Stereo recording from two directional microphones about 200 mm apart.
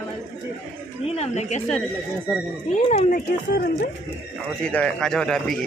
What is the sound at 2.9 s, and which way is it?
Speech, 45° left (ahead or behind).